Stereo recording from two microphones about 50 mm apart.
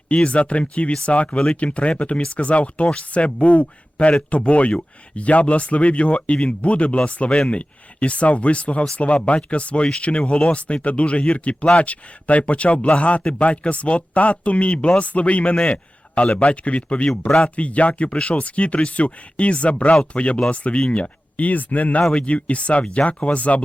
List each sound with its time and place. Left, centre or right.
0.2 s speech: left
17.1 s speech: centre
17.6 s speech: left